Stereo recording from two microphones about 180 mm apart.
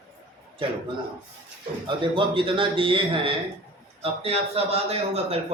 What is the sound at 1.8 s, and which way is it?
A man's voice, 30° right (ahead or behind).